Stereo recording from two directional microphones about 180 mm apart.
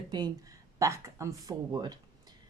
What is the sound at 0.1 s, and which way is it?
Speech, 20° right (ahead or behind).